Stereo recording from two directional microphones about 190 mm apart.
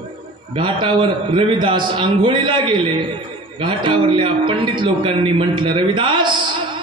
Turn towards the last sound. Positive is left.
turn(degrees=-25)  # may be behind; listen again after turning